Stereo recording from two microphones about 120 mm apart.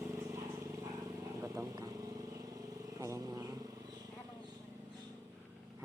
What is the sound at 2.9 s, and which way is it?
Vehicle, 30° right (ahead or behind).